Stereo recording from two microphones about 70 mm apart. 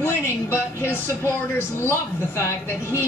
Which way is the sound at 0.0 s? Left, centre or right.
Left.